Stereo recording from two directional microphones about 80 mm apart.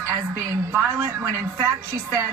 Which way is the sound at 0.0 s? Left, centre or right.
Right.